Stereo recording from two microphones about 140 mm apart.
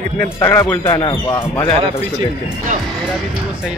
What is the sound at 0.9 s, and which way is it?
Speech, 30° left (ahead or behind).